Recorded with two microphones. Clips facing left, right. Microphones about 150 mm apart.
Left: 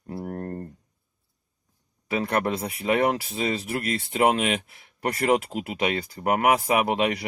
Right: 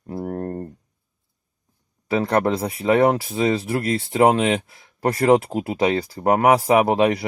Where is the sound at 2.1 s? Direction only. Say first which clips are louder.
Right 5 dB; 30° right (ahead or behind).